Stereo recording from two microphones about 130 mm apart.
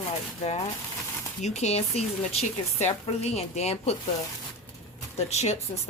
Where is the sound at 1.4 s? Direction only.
60° left (ahead or behind).